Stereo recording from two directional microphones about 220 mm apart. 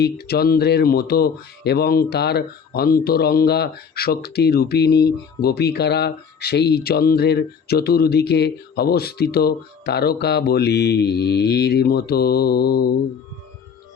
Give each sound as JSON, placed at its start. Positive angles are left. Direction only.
{"t": 0.0, "sound": "speech", "side_deg": 45}